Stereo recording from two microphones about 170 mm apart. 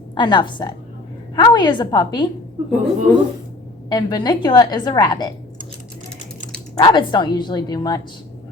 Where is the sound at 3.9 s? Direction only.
25° left (ahead or behind).